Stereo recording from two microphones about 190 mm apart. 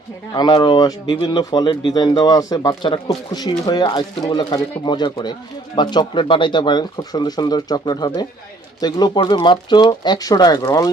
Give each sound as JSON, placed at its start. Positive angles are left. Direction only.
{"t": 0.3, "sound": "speech", "side_deg": 20}